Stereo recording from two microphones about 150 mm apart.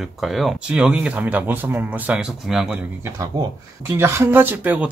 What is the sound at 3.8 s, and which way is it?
Speech, 15° right (ahead or behind).